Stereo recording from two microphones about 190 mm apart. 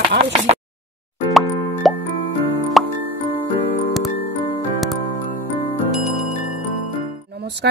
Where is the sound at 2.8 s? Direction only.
Centre (ahead or behind).